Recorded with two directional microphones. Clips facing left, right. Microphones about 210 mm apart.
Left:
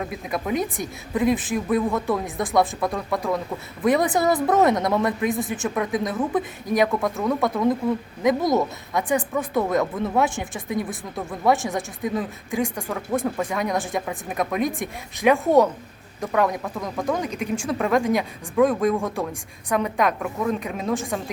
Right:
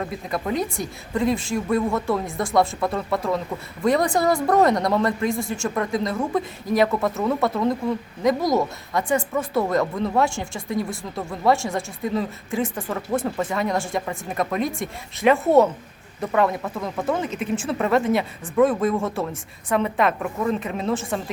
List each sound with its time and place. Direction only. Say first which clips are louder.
0.0 s speech: right 1 dB; centre (ahead or behind)